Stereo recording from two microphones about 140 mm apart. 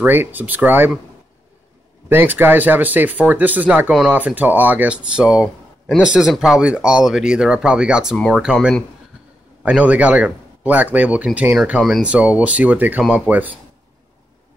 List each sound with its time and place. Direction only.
0.0 s speech: 15° right (ahead or behind)
2.0 s speech: 15° right (ahead or behind)
11.8 s speech: centre (ahead or behind)
12.1 s speech: 10° right (ahead or behind)